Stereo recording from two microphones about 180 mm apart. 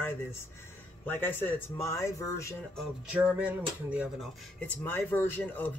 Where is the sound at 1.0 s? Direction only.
10° left (ahead or behind).